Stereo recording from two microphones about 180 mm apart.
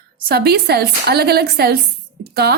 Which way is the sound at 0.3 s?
60° right (ahead or behind).